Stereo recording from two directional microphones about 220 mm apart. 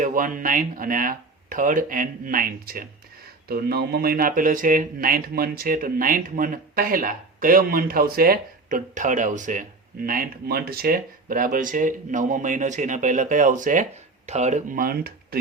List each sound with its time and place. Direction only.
0.0 s speech: 40° right (ahead or behind)